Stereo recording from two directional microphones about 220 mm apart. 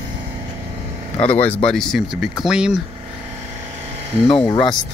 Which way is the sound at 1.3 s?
5° left (ahead or behind).